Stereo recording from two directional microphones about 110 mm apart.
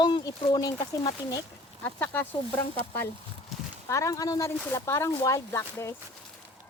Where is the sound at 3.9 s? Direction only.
30° left (ahead or behind).